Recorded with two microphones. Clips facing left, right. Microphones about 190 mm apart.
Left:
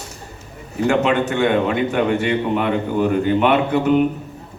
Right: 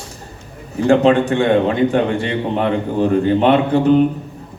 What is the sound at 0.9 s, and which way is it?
A man's voice, 35° right (ahead or behind).